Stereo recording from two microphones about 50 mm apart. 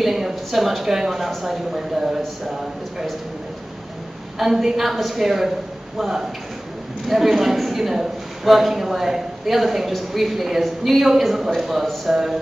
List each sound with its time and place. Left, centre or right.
0.0 s a woman's voice: centre
4.4 s a woman's voice: centre